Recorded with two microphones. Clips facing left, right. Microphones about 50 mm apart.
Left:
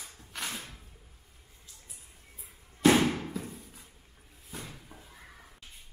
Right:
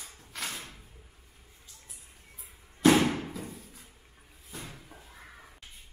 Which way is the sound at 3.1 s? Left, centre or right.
Centre.